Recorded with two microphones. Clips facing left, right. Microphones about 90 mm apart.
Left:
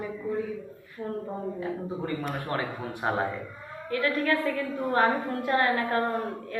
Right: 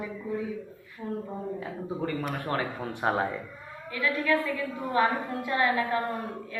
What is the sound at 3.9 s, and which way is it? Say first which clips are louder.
Music: left 2 dB; 45° left (ahead or behind).